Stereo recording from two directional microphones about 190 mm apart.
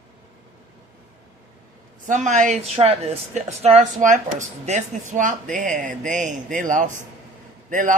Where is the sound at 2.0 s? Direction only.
40° right (ahead or behind).